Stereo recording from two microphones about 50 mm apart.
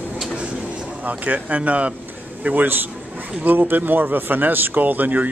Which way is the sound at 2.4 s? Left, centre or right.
Right.